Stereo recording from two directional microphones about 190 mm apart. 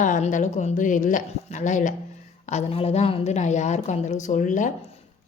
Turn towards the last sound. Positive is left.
turn(degrees=40)  # may be behind; listen again after turning